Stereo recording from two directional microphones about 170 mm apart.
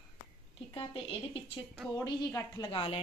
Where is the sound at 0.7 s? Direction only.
30° left (ahead or behind); by 2.7 s 15° left (ahead or behind).